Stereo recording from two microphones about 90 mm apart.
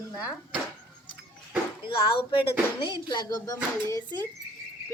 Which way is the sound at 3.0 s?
55° left (ahead or behind).